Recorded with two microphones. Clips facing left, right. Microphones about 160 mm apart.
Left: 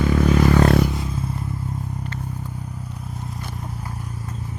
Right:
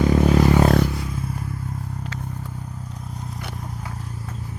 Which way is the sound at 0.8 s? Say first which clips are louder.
Left 1 dB; 20° left (ahead or behind).